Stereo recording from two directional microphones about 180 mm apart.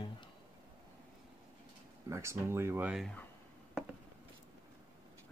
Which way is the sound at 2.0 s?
15° right (ahead or behind).